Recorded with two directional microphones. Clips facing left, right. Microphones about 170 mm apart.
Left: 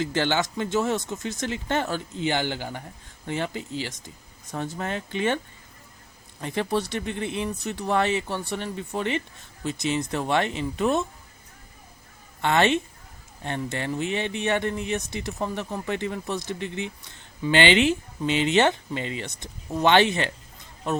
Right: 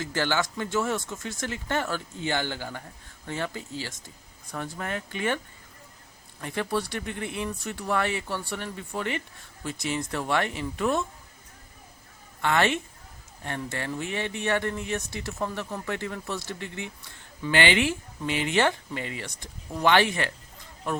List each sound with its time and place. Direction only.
0.0 s speech: 20° left (ahead or behind)
6.4 s speech: 20° left (ahead or behind)
12.4 s speech: 25° left (ahead or behind)